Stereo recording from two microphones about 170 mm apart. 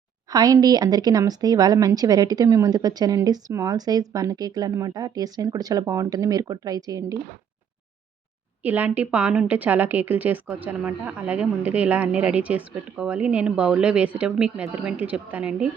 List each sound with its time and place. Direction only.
0.3 s speech: 20° right (ahead or behind)
8.6 s a woman's voice: 10° right (ahead or behind)